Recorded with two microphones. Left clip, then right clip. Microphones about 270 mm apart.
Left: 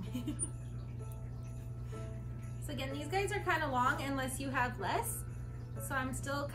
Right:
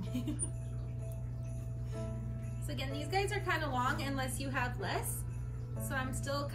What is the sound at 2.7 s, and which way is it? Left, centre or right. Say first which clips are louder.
A woman's voice: right 1 dB; centre.